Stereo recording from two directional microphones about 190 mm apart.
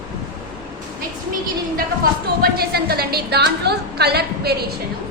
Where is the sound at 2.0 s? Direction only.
50° right (ahead or behind).